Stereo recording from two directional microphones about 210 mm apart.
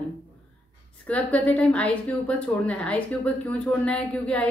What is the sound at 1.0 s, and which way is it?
A woman's voice, 5° left (ahead or behind).